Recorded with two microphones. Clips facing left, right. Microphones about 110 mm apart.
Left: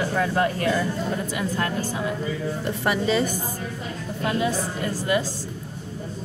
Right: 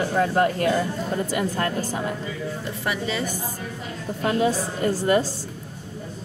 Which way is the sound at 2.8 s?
35° left (ahead or behind).